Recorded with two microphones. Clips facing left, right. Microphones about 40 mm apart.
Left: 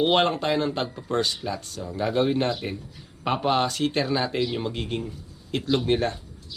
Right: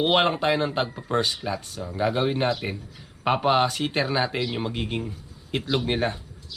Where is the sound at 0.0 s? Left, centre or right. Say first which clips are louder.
Even; centre.